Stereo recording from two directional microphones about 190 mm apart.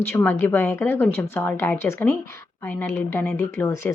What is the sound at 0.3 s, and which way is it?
A woman's voice, 10° left (ahead or behind).